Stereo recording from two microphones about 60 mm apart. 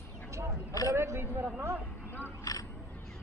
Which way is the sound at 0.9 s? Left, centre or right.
Right.